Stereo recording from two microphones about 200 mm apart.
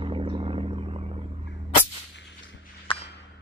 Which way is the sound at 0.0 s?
25° right (ahead or behind).